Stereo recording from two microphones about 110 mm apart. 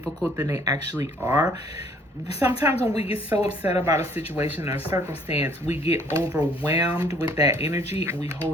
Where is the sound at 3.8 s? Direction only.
25° right (ahead or behind).